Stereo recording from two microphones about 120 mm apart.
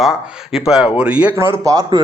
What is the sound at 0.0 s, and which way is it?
Speech, 5° right (ahead or behind).